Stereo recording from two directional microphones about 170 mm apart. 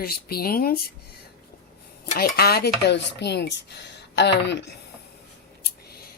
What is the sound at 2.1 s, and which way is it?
Speech, 55° left (ahead or behind).